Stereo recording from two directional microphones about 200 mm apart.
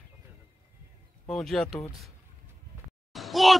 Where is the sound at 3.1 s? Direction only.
Centre (ahead or behind).